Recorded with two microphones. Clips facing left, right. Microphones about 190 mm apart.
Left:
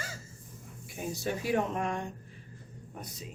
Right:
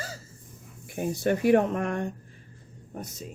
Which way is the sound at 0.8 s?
55° right (ahead or behind).